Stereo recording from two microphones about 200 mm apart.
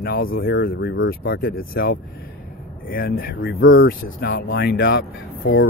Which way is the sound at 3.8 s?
50° left (ahead or behind).